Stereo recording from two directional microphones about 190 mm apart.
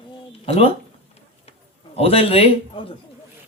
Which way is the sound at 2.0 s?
30° left (ahead or behind).